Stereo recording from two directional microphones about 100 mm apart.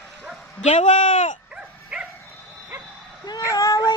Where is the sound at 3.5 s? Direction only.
35° left (ahead or behind).